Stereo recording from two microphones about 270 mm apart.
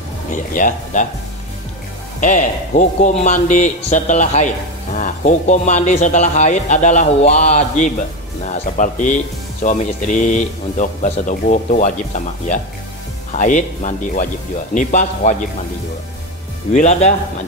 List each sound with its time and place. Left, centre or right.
0.3 s speech: left
2.1 s speech: left
16.7 s speech: left